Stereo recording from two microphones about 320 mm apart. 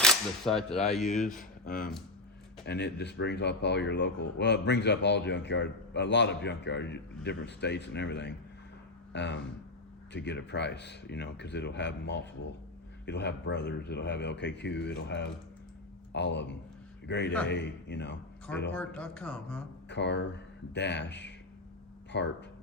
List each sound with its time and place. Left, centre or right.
0.0 s speech: centre
1.0 s speech: left
18.7 s speech: centre
19.9 s speech: left